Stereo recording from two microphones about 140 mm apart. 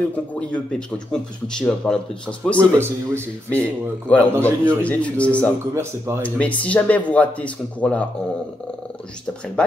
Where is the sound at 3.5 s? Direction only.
10° left (ahead or behind).